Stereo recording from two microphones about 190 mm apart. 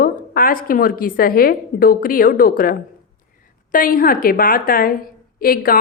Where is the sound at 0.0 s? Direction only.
50° left (ahead or behind).